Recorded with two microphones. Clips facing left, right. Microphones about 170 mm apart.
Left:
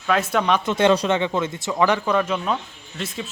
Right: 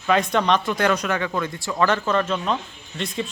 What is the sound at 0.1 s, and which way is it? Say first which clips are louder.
Speech: right 1 dB; 5° left (ahead or behind).